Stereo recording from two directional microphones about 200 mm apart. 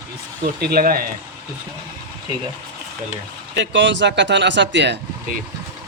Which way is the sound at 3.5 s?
65° right (ahead or behind).